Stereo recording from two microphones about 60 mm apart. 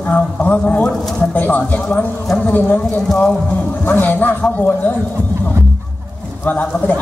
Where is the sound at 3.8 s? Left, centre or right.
Left.